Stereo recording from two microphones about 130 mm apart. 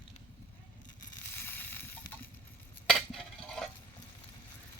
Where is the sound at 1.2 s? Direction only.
15° left (ahead or behind).